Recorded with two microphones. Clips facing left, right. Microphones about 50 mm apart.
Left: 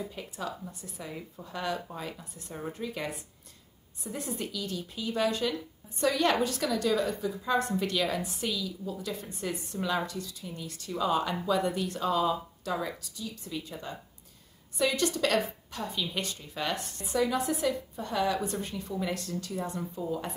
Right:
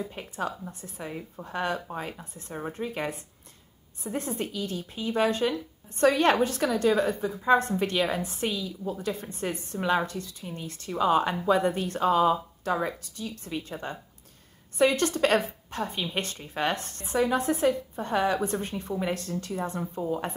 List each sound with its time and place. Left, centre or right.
0.1 s a woman's voice: right